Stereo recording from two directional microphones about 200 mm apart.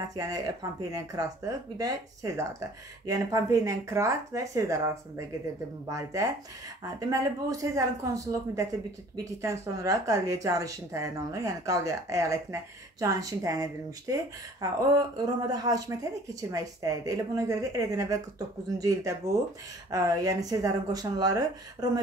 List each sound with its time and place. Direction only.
0.1 s speech: 20° right (ahead or behind)